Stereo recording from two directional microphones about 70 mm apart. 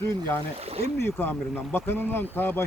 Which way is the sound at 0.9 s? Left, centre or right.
Left.